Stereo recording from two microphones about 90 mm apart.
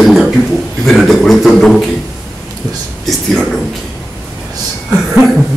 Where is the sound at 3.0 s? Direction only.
Centre (ahead or behind).